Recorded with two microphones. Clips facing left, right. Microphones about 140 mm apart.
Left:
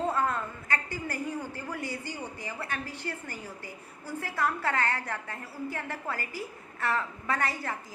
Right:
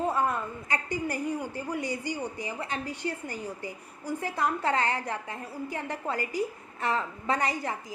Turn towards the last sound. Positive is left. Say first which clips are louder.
# right 3 dB
turn(degrees=-15)  # may be behind; listen again after turning